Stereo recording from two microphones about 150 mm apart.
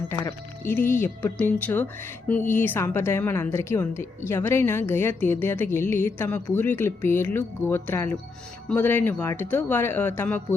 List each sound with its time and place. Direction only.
0.1 s speech: 15° left (ahead or behind)